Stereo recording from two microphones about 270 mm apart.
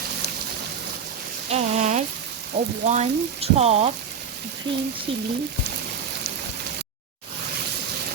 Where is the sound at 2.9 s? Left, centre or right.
Right.